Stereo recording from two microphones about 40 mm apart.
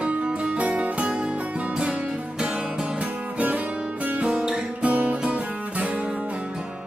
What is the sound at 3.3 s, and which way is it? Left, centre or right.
Music, right.